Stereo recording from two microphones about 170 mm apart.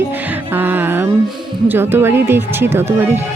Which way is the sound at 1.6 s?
10° right (ahead or behind).